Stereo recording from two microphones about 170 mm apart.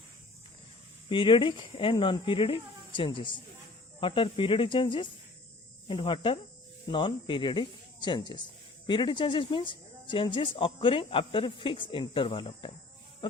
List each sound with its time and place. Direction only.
1.1 s speech: 30° left (ahead or behind)